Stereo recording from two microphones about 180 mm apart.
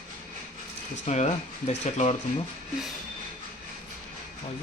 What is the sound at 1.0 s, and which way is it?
Speech, 40° left (ahead or behind).